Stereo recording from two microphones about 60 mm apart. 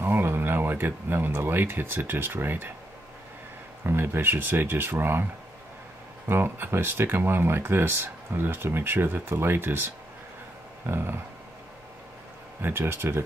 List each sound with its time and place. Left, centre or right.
0.0 s speech: right
3.8 s speech: right
6.2 s speech: right
12.6 s speech: right